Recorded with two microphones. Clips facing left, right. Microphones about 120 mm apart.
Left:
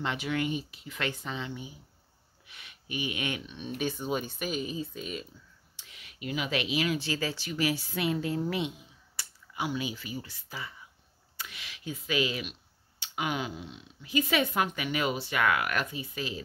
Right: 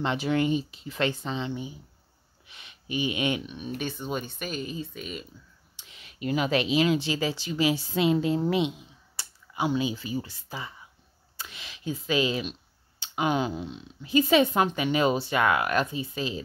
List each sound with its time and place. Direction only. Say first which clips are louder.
0.0 s speech: right 6 dB; 30° right (ahead or behind)
3.5 s speech: right 3 dB; 5° right (ahead or behind)
3.8 s speech: left 2 dB; 5° left (ahead or behind)
5.8 s speech: right 7 dB; 25° right (ahead or behind)